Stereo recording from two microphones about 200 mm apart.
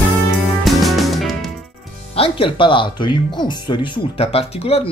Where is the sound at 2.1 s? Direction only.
25° left (ahead or behind).